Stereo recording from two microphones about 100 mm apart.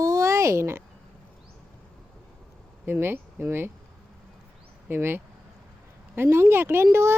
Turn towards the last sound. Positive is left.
turn(degrees=-25)  # may be behind; listen again after turning